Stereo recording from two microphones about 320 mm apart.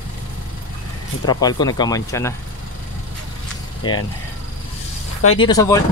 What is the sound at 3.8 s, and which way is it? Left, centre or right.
Speech, centre.